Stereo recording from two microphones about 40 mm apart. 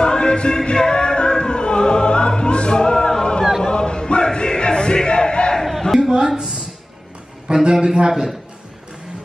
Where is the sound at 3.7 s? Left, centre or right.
Left.